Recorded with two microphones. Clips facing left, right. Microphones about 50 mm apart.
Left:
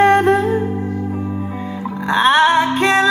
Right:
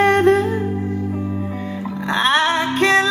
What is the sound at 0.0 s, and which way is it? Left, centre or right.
Music, centre.